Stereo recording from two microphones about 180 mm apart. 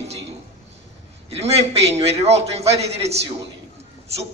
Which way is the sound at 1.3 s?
35° right (ahead or behind).